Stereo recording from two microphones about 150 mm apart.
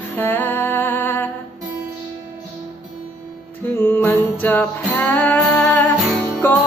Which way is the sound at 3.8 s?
15° left (ahead or behind).